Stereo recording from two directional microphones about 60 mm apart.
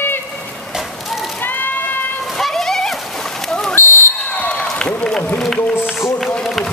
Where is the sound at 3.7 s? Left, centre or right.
Left.